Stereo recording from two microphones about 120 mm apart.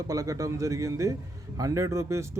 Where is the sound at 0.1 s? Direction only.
30° right (ahead or behind).